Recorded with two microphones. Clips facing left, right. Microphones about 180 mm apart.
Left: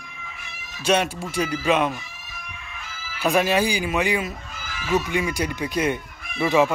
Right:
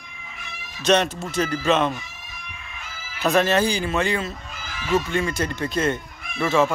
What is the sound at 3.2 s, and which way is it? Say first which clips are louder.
Speech: right 1 dB; 10° left (ahead or behind).